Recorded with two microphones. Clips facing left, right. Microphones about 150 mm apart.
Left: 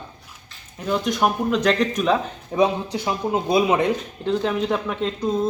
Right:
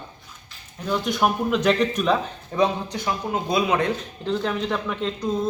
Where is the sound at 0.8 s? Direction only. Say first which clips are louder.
Left 1 dB; centre (ahead or behind).